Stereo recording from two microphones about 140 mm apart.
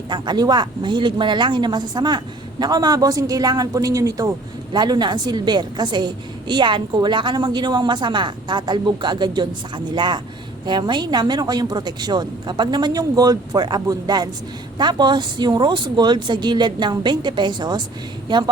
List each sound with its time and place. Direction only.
0.1 s a woman's voice: 30° right (ahead or behind)